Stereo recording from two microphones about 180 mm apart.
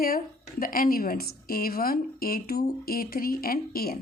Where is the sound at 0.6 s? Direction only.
55° left (ahead or behind).